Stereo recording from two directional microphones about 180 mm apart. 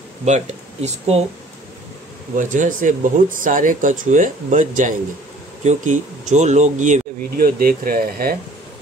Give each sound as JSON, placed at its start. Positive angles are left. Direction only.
{"t": 0.2, "sound": "speech", "side_deg": -40}
{"t": 2.3, "sound": "speech", "side_deg": -45}